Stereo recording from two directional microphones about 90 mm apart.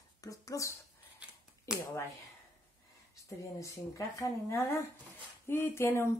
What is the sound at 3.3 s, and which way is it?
A woman's voice, 35° left (ahead or behind).